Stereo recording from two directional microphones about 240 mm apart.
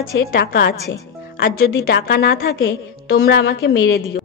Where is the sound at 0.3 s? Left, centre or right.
Left.